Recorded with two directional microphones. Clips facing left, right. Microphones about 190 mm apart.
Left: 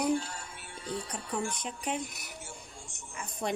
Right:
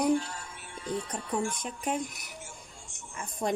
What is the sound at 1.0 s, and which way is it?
Speech, 50° right (ahead or behind).